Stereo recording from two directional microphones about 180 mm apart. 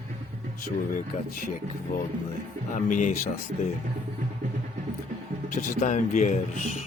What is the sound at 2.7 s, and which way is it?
Speech, 45° left (ahead or behind).